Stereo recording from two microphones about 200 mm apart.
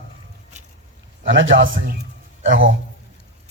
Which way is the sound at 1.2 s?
70° right (ahead or behind).